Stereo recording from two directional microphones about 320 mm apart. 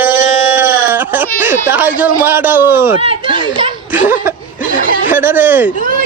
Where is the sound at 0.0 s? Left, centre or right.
Centre.